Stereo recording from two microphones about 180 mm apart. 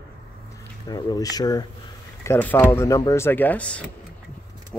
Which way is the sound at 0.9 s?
20° left (ahead or behind).